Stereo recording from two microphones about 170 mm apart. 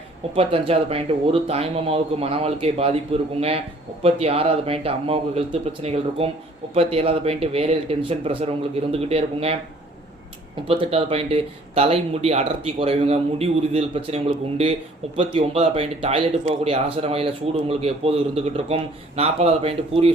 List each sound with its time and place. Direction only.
0.3 s speech: 35° right (ahead or behind)
10.7 s speech: 35° right (ahead or behind)